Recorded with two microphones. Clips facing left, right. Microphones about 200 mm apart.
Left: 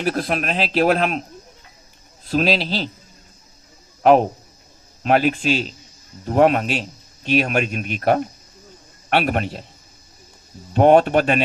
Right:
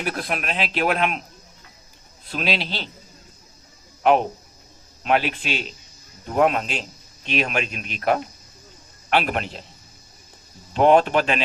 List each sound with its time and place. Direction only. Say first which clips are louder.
0.0 s speech: left 5 dB; 35° left (ahead or behind)
2.2 s speech: left 7 dB; 40° left (ahead or behind)
4.0 s speech: left 4 dB; 40° left (ahead or behind)
10.8 s speech: left 3 dB; 45° left (ahead or behind)